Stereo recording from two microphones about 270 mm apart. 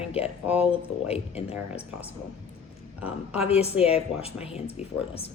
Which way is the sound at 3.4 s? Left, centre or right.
Left.